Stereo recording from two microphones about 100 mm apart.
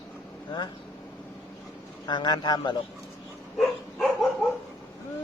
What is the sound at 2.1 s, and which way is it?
Speech, 45° left (ahead or behind).